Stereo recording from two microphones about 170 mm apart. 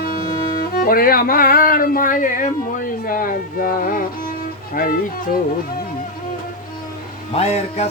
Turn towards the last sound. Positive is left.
turn(degrees=40)  # may be behind; listen again after turning